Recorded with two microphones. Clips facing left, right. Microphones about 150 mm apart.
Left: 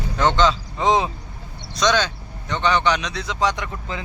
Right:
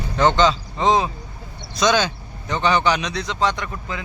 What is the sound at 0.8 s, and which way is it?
Speech, 20° left (ahead or behind).